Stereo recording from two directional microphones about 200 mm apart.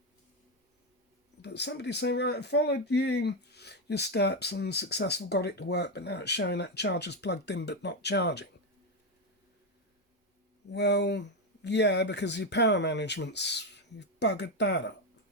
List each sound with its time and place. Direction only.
1.4 s speech: 55° left (ahead or behind)
10.7 s speech: 60° left (ahead or behind)